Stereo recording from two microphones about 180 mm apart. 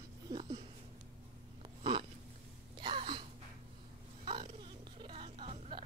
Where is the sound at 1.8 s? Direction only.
30° right (ahead or behind).